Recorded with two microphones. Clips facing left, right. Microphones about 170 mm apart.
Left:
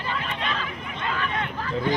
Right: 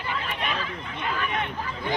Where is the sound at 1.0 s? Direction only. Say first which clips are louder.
Even; 15° right (ahead or behind).